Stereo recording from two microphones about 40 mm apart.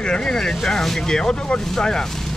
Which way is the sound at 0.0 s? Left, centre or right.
Centre.